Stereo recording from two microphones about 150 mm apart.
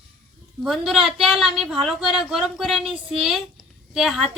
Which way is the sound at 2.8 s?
40° right (ahead or behind).